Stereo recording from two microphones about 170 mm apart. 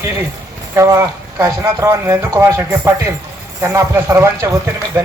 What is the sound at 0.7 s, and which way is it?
Speech, 15° right (ahead or behind).